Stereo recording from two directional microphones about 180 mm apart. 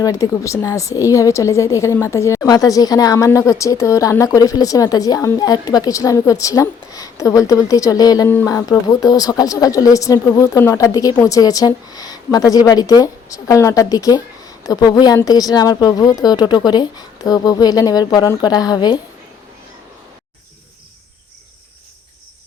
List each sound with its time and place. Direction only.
0.0 s a woman's voice: 20° left (ahead or behind)